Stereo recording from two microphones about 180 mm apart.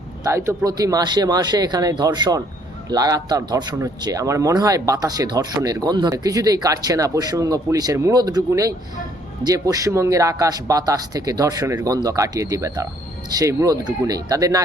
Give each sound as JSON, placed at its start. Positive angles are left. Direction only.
{"t": 0.3, "sound": "speech", "side_deg": -15}